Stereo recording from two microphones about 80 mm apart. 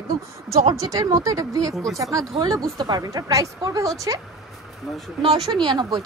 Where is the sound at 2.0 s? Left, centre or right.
Right.